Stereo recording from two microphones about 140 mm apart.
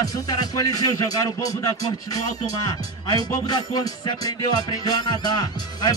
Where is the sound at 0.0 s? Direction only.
25° left (ahead or behind).